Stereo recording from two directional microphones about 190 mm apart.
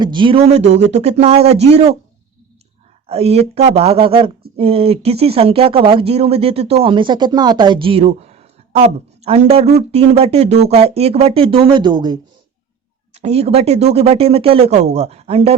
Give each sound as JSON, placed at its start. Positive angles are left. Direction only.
{"t": 0.0, "sound": "speech", "side_deg": -25}
{"t": 3.1, "sound": "speech", "side_deg": -30}
{"t": 13.1, "sound": "speech", "side_deg": -35}